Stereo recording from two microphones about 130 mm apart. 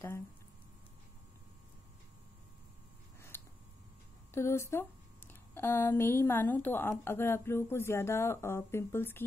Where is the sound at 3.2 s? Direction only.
20° left (ahead or behind).